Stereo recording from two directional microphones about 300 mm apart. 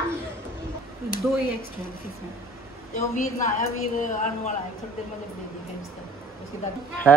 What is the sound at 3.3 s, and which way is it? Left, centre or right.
Speech, left.